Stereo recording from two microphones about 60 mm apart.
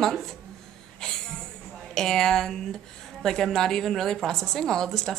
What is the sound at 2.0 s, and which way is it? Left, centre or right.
A woman's voice, centre.